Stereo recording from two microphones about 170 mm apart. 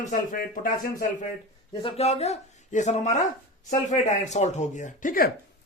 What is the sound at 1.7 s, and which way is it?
A man's voice, 30° left (ahead or behind).